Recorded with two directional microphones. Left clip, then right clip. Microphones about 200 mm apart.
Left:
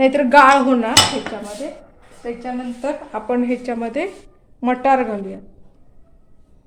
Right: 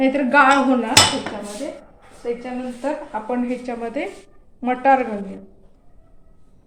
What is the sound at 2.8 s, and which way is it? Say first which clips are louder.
A woman's voice: right 1 dB; 55° left (ahead or behind).